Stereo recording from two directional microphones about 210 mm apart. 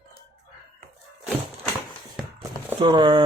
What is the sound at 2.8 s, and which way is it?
Speech, 25° right (ahead or behind).